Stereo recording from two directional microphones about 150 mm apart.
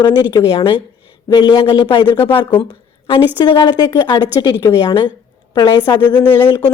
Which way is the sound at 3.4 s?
30° left (ahead or behind).